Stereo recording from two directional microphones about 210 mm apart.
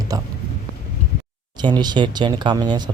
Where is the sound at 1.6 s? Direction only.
20° right (ahead or behind).